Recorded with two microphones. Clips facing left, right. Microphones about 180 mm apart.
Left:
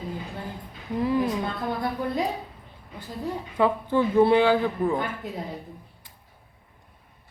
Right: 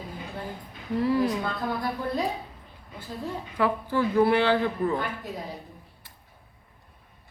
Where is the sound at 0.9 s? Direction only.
15° left (ahead or behind).